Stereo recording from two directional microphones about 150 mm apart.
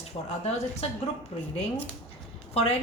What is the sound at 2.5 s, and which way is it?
Speech, 45° left (ahead or behind).